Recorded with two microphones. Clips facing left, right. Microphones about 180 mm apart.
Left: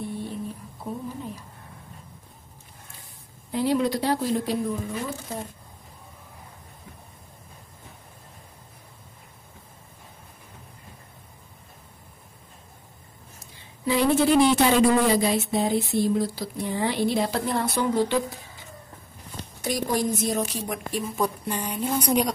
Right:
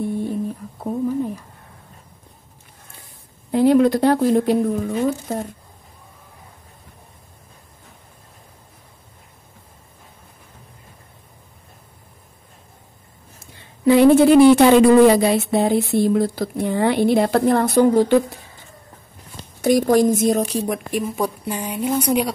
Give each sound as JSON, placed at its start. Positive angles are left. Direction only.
{"t": 0.1, "sound": "a sound", "side_deg": -50}
{"t": 3.5, "sound": "speech", "side_deg": -55}
{"t": 13.8, "sound": "speech", "side_deg": -60}
{"t": 21.2, "sound": "a woman's voice", "side_deg": -5}